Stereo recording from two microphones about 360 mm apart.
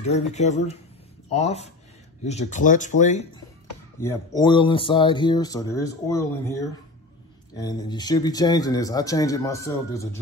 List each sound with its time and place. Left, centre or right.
0.0 s speech: centre
4.0 s speech: centre